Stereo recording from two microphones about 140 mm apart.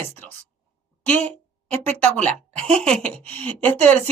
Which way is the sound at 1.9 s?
15° left (ahead or behind).